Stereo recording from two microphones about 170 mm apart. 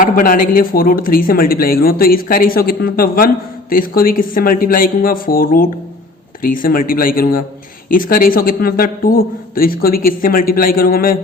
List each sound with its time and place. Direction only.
0.0 s speech: 55° left (ahead or behind)